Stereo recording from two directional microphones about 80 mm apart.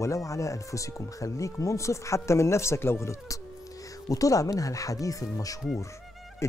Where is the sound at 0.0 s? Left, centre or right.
Left.